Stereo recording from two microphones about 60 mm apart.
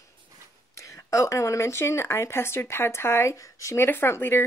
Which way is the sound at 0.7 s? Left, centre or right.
Left.